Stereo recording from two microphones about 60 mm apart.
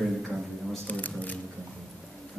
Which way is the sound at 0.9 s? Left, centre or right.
Left.